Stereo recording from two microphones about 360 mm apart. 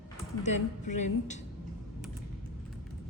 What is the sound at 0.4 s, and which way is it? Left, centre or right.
Speech, centre.